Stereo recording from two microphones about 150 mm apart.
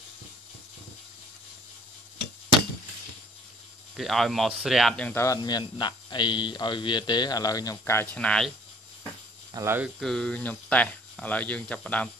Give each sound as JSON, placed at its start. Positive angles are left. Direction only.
{"t": 3.9, "sound": "speech", "side_deg": 0}
{"t": 5.2, "sound": "speech", "side_deg": 25}
{"t": 9.5, "sound": "speech", "side_deg": -20}
{"t": 9.9, "sound": "speech", "side_deg": 5}